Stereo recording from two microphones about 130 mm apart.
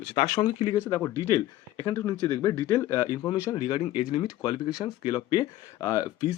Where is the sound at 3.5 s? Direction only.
35° left (ahead or behind).